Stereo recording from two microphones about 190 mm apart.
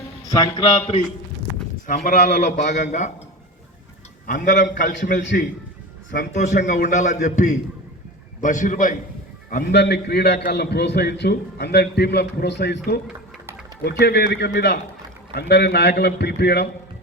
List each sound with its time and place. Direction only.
0.3 s a man's voice: 20° left (ahead or behind)
2.0 s a man's voice: 40° left (ahead or behind)
4.3 s a man's voice: 40° left (ahead or behind)
4.9 s a man's voice: 70° left (ahead or behind)
6.1 s a man's voice: 40° left (ahead or behind)
9.8 s a man's voice: 60° left (ahead or behind)
14.0 s a man's voice: 55° left (ahead or behind)